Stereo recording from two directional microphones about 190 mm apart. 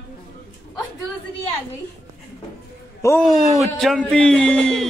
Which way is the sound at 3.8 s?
5° left (ahead or behind).